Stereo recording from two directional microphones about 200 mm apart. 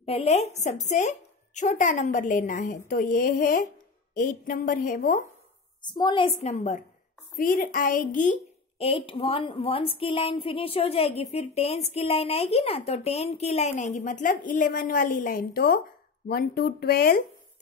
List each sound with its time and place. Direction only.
0.0 s a woman's voice: 30° left (ahead or behind)
5.9 s a woman's voice: 20° left (ahead or behind); by 17.2 s 50° left (ahead or behind)